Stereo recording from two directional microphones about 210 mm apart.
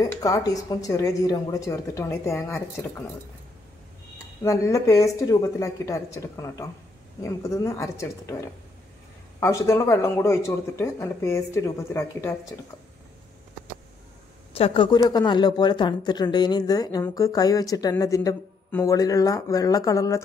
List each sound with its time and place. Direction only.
0.0 s speech: 15° left (ahead or behind)
4.4 s speech: 15° left (ahead or behind)
9.4 s speech: 15° left (ahead or behind)
14.5 s speech: 25° left (ahead or behind)